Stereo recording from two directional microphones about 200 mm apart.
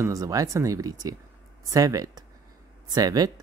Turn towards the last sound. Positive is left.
turn(degrees=-20)  # may be behind; listen again after turning